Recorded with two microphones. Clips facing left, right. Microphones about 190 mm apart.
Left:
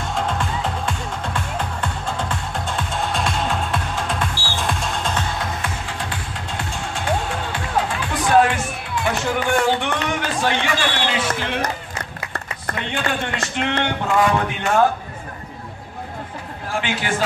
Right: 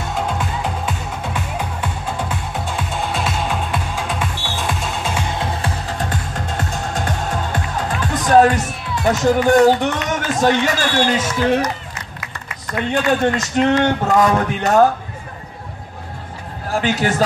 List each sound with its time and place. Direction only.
0.3 s music: 5° right (ahead or behind)
5.4 s music: 35° right (ahead or behind)
10.0 s speech: 40° right (ahead or behind)
12.9 s speech: 40° right (ahead or behind)
16.7 s speech: 40° right (ahead or behind)